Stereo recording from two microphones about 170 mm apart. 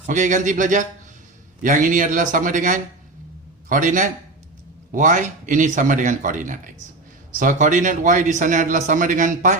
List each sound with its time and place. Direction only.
0.0 s speech: 50° right (ahead or behind)